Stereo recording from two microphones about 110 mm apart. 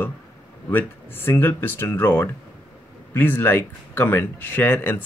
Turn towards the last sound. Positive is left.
turn(degrees=20)  # may be behind; listen again after turning